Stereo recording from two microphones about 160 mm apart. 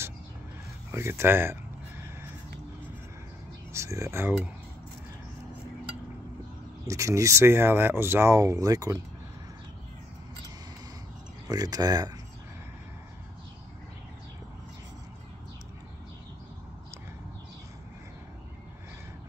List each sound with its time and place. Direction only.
0.9 s speech: 15° right (ahead or behind)
3.7 s speech: 20° right (ahead or behind)
6.9 s speech: 20° right (ahead or behind)
11.4 s speech: 25° right (ahead or behind)